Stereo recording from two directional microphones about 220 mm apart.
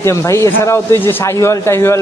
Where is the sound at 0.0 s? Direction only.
15° left (ahead or behind).